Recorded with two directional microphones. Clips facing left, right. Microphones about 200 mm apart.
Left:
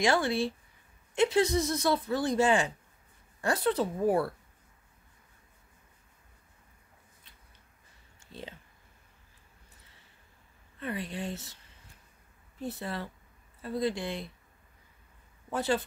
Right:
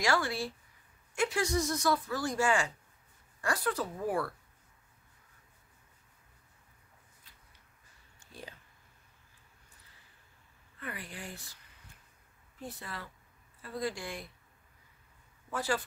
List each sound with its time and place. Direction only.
0.0 s speech: 20° left (ahead or behind)
8.3 s a sound: 25° left (ahead or behind)
10.8 s speech: 20° left (ahead or behind)
12.6 s speech: 25° left (ahead or behind)
15.5 s speech: 20° left (ahead or behind)